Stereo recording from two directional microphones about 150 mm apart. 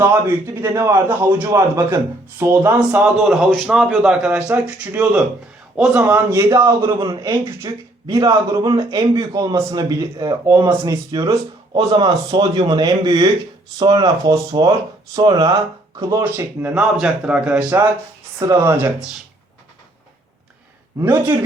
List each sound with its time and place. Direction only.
0.0 s a man's voice: 15° right (ahead or behind)
21.0 s speech: 15° right (ahead or behind)